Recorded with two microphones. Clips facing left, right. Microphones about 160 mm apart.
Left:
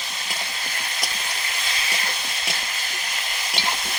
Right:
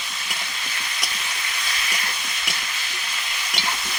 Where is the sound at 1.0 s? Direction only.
35° left (ahead or behind).